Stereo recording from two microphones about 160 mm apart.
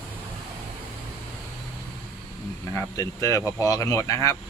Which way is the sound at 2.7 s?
20° left (ahead or behind).